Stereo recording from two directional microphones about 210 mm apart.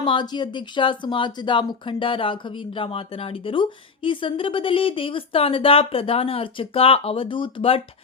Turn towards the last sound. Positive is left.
turn(degrees=25)  # may be behind; listen again after turning